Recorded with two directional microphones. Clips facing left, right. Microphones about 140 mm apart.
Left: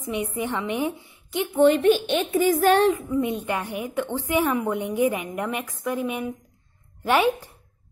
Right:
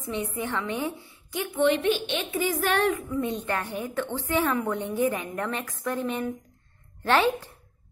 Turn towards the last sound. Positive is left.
turn(degrees=15)  # may be behind; listen again after turning